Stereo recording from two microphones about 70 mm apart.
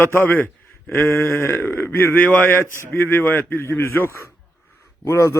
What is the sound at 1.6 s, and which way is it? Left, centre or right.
A man's voice, left.